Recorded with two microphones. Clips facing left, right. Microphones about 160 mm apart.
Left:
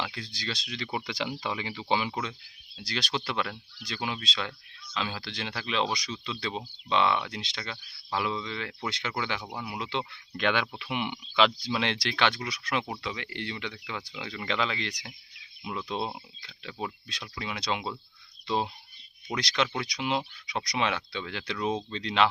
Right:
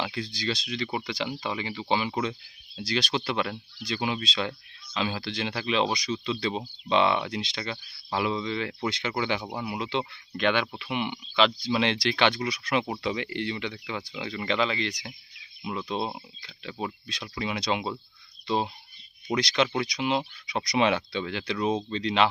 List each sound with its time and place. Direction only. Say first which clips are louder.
0.0 s speech: right 5 dB; 5° right (ahead or behind)
13.4 s speech: right 5 dB; 5° right (ahead or behind)
17.3 s speech: right 4 dB; 10° right (ahead or behind)